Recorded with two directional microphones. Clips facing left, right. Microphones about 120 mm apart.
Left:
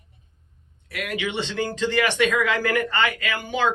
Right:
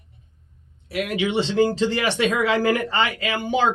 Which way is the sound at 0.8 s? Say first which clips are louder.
Right 5 dB; 25° right (ahead or behind).